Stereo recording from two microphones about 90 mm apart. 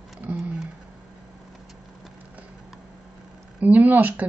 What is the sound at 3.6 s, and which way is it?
Speech, 20° right (ahead or behind).